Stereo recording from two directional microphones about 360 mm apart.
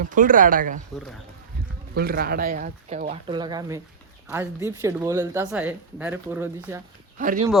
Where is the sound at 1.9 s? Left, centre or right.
Right; by 6.8 s centre.